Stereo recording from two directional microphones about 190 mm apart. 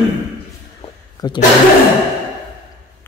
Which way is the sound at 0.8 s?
20° left (ahead or behind).